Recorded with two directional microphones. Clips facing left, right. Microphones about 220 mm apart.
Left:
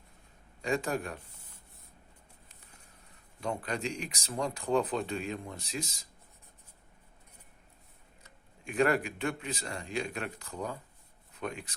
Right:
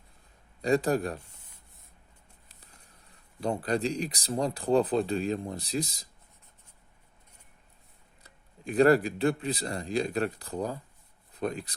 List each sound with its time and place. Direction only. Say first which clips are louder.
0.6 s speech: right 6 dB; 35° right (ahead or behind)
3.4 s speech: right 6 dB; 35° right (ahead or behind)
8.2 s speech: right 8 dB; 35° right (ahead or behind)